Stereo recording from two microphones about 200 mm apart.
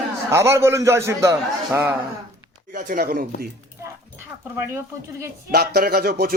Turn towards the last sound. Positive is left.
turn(degrees=-50)  # may be behind; listen again after turning